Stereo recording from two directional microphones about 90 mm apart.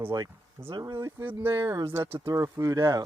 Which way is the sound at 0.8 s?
40° right (ahead or behind).